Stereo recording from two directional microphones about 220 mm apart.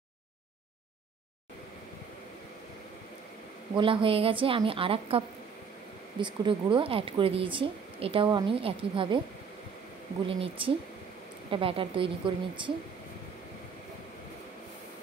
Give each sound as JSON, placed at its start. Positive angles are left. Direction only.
{"t": 3.7, "sound": "speech", "side_deg": -25}
{"t": 10.2, "sound": "speech", "side_deg": -25}